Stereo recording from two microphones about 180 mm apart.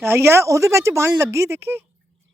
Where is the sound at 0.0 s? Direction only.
15° right (ahead or behind).